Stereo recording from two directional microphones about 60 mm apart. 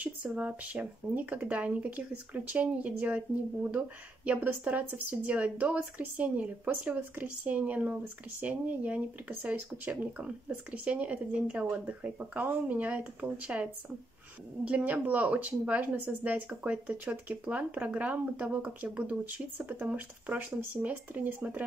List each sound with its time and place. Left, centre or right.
0.3 s a woman's voice: right